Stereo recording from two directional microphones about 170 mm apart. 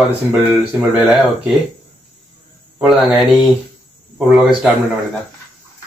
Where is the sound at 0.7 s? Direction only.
10° right (ahead or behind).